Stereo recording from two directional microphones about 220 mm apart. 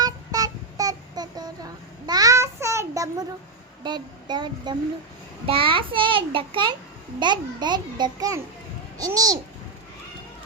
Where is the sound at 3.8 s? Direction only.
20° right (ahead or behind).